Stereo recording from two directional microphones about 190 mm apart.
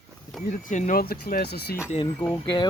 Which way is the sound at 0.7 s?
40° left (ahead or behind).